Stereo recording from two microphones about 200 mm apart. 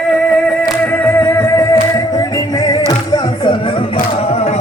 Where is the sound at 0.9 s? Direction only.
10° left (ahead or behind).